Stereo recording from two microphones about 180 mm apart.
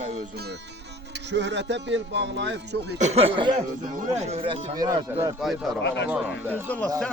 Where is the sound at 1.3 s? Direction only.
75° right (ahead or behind).